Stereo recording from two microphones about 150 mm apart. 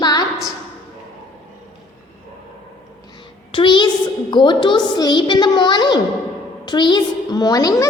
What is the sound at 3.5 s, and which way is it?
A woman's voice, 35° left (ahead or behind).